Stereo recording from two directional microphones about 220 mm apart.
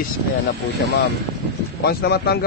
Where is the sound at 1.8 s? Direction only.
45° left (ahead or behind).